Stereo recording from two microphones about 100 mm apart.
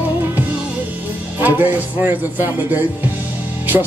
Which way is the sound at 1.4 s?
20° right (ahead or behind).